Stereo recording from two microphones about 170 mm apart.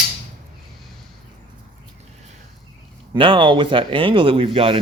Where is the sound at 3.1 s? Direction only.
30° right (ahead or behind).